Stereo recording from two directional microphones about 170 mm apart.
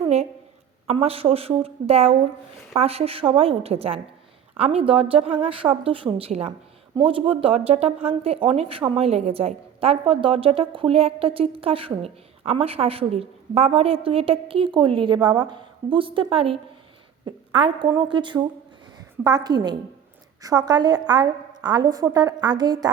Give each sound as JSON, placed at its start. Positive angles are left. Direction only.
{"t": 0.9, "sound": "a woman's voice", "side_deg": -35}